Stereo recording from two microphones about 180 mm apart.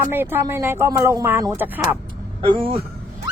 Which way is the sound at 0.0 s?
10° right (ahead or behind).